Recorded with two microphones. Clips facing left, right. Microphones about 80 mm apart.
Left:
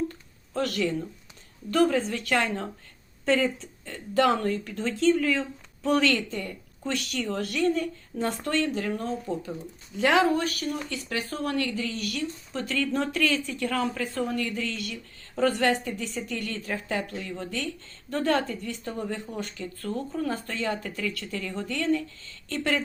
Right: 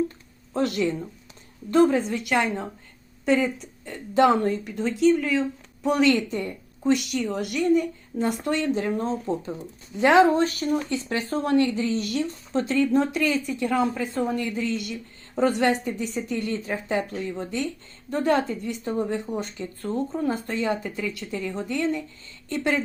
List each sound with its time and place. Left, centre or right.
0.5 s a woman's voice: right